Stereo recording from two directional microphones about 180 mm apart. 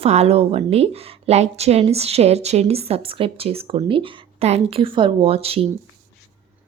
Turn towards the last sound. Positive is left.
turn(degrees=-35)  # may be behind; listen again after turning